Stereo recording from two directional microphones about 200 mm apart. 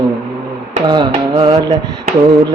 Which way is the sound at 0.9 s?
20° right (ahead or behind).